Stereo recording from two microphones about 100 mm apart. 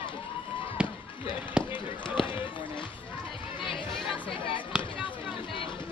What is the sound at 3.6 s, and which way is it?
Chatter, 60° left (ahead or behind).